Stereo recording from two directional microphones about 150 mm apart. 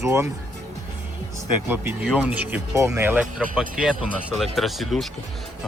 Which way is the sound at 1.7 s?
10° right (ahead or behind).